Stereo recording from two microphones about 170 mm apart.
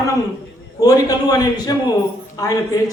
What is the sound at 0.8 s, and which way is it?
A man's voice, 20° left (ahead or behind).